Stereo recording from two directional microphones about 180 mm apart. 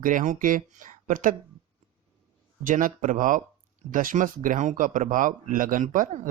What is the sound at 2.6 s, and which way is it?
Speech, 45° right (ahead or behind).